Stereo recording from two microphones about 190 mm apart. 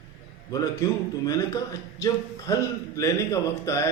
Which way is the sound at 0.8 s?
15° left (ahead or behind).